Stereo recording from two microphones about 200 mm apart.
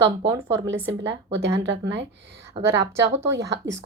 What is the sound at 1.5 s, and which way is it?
Speech, 60° right (ahead or behind).